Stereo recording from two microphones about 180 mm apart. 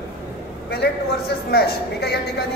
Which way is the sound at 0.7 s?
60° left (ahead or behind).